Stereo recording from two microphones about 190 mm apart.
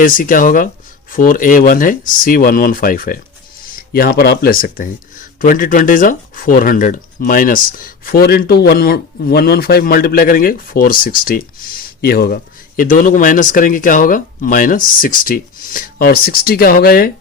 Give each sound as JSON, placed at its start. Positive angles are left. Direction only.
{"t": 0.0, "sound": "speech", "side_deg": 45}